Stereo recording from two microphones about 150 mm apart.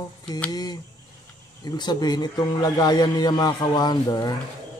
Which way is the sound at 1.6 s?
30° left (ahead or behind).